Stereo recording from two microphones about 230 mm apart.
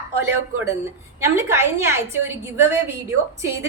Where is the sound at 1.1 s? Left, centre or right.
Centre.